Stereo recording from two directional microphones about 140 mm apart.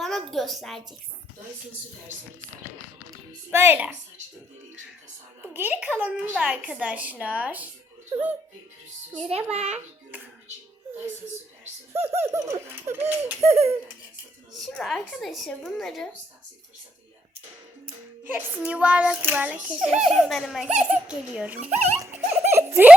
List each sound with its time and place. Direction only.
0.0 s a woman's voice: centre (ahead or behind)
3.5 s a child's voice: 15° right (ahead or behind)
5.5 s a child's voice: 10° right (ahead or behind)
8.1 s a child's voice: 40° right (ahead or behind)
9.3 s a child's voice: 45° right (ahead or behind)
12.1 s a child's voice: 20° right (ahead or behind)
13.4 s a child's voice: 50° right (ahead or behind)
14.6 s a woman's voice: centre (ahead or behind)
18.3 s a child's voice: 10° right (ahead or behind)
22.5 s a sound: 15° right (ahead or behind)